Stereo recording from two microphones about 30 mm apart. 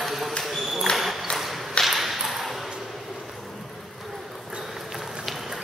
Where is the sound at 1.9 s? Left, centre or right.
Centre.